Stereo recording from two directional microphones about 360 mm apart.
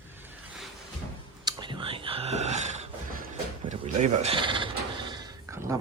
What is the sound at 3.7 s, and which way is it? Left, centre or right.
Sheep, centre.